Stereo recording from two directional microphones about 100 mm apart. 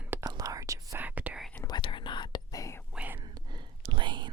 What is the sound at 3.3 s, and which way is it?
Whispering, 50° right (ahead or behind).